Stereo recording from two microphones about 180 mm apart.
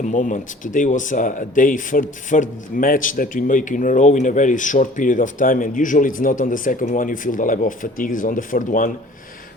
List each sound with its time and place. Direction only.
0.0 s speech: 45° left (ahead or behind)